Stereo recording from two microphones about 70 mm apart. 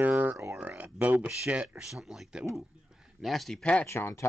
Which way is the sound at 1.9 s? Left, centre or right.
Centre.